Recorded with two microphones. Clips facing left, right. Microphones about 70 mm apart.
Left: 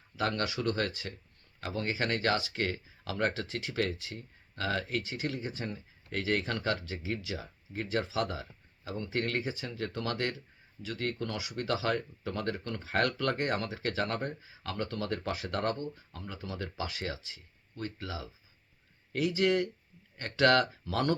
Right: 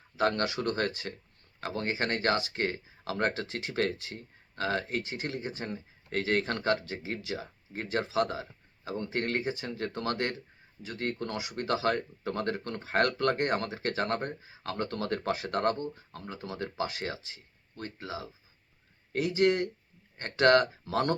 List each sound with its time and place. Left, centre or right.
0.2 s speech: right